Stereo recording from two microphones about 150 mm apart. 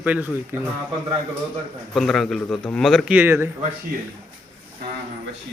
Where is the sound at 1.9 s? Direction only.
Centre (ahead or behind).